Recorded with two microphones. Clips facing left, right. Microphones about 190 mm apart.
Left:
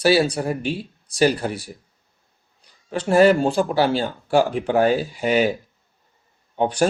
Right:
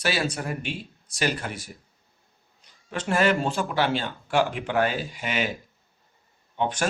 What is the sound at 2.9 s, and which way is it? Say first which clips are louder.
A man's voice: left 8 dB; 35° left (ahead or behind).